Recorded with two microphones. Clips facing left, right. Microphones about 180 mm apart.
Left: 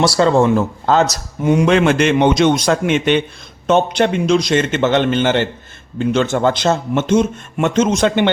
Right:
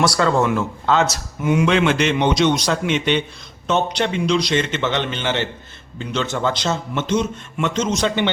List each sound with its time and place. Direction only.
0.0 s speech: 30° left (ahead or behind); by 8.3 s 55° left (ahead or behind)